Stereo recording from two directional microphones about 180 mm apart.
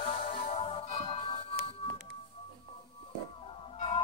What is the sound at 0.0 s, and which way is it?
Music, 35° left (ahead or behind).